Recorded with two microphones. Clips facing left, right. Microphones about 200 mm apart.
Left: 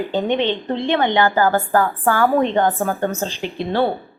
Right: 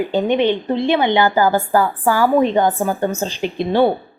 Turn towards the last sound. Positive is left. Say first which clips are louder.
# right 4 dB
turn(degrees=-15)  # may be behind; listen again after turning